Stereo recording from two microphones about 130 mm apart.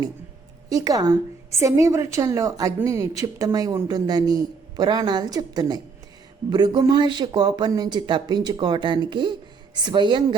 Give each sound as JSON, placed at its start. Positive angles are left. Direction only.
{"t": 0.7, "sound": "a woman's voice", "side_deg": -30}